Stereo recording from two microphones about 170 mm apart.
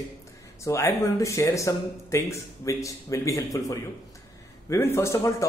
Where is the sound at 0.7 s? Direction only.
15° left (ahead or behind).